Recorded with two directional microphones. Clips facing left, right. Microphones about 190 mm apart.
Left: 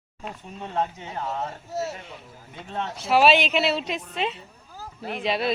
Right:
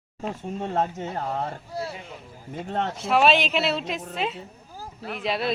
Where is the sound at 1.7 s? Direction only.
45° left (ahead or behind).